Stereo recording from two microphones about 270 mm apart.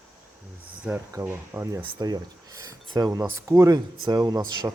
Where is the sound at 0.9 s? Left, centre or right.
Centre.